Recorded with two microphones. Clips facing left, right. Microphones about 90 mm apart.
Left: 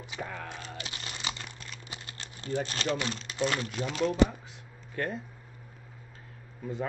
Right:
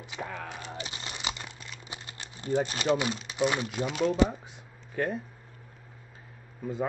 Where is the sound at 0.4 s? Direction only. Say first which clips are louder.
Right 1 dB; centre (ahead or behind).